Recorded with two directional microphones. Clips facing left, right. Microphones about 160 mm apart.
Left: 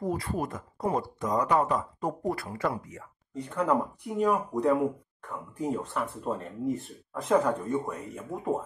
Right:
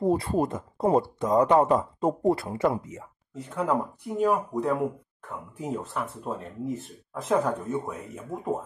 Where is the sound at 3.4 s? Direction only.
5° right (ahead or behind).